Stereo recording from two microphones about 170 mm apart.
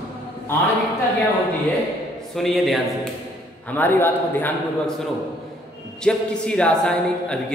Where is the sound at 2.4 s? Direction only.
Centre (ahead or behind).